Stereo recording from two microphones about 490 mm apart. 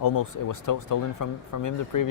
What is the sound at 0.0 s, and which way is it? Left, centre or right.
Speech, left.